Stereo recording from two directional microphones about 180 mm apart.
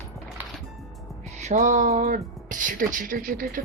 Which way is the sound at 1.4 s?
40° right (ahead or behind).